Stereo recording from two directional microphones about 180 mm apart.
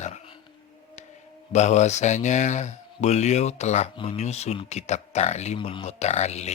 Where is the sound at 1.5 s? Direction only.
40° left (ahead or behind).